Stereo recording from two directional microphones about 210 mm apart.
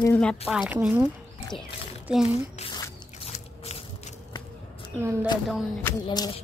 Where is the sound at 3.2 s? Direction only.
30° left (ahead or behind).